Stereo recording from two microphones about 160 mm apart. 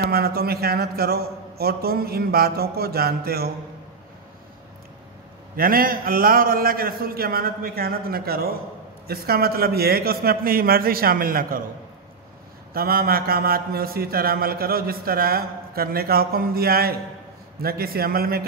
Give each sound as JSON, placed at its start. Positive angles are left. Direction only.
{"t": 0.1, "sound": "speech", "side_deg": -75}
{"t": 5.6, "sound": "speech", "side_deg": -65}
{"t": 12.7, "sound": "speech", "side_deg": -70}